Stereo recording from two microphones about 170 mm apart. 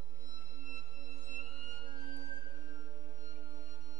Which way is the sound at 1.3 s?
50° right (ahead or behind).